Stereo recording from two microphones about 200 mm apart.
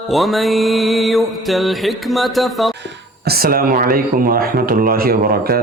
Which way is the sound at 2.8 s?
55° right (ahead or behind).